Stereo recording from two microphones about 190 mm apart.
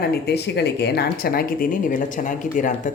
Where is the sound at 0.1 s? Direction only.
60° left (ahead or behind).